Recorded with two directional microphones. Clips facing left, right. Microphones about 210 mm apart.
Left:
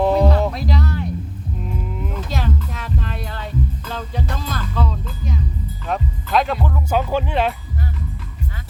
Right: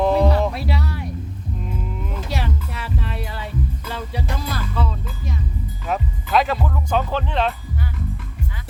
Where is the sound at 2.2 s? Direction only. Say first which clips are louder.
Left 1 dB; 10° right (ahead or behind).